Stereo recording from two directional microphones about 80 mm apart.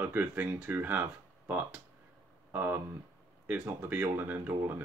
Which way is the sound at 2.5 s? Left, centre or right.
Right.